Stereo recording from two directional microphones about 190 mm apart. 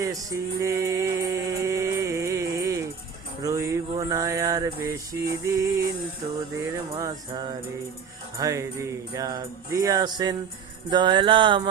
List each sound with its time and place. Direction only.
0.0 s music: 15° right (ahead or behind)
3.4 s mantra: 15° right (ahead or behind)
7.0 s music: 20° right (ahead or behind)